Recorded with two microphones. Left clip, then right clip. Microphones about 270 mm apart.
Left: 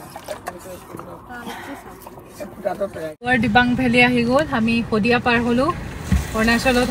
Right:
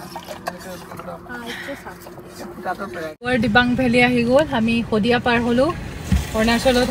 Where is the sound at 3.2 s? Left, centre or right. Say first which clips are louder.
Left 1 dB; centre.